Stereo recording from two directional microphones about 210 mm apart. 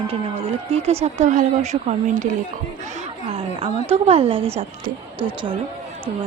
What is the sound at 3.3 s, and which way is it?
A woman's voice, 25° right (ahead or behind).